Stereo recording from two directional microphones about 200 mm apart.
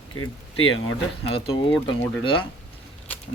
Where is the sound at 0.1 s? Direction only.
90° left.